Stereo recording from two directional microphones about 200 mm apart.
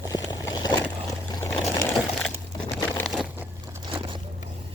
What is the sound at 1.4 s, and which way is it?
Sewing machine, 10° left (ahead or behind).